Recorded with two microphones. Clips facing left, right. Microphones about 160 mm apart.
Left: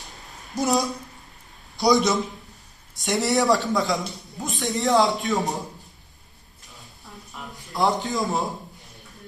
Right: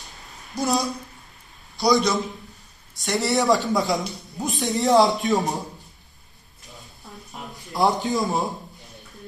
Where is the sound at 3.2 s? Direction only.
Centre (ahead or behind).